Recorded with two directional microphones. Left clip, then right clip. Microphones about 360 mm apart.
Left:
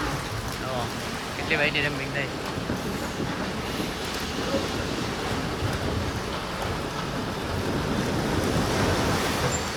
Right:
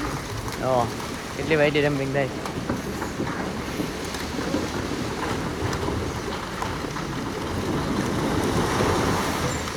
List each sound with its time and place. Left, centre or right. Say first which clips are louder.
1.5 s speech: right 4 dB; centre